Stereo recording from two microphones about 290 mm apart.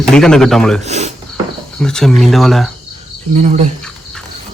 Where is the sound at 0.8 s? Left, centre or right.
Right.